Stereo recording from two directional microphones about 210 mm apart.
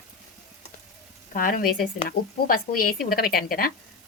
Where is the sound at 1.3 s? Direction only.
40° left (ahead or behind).